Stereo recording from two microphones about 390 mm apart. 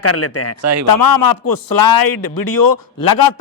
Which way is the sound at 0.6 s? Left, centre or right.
Right.